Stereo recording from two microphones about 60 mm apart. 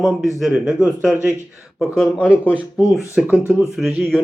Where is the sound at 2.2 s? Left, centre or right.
Left.